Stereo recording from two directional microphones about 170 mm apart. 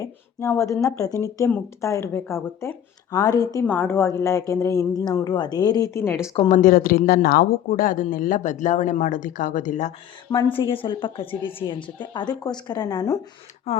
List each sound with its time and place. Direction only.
0.0 s speech: 15° left (ahead or behind)
6.5 s speech: 55° left (ahead or behind)
10.3 s a woman's voice: 30° left (ahead or behind)
13.7 s speech: 35° left (ahead or behind)